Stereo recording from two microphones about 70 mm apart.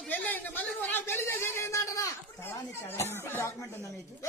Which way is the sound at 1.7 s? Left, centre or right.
Left.